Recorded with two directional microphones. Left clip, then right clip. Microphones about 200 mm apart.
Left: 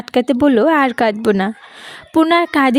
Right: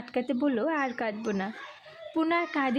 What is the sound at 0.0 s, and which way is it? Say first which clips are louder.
A woman's voice: left 15 dB; 45° left (ahead or behind).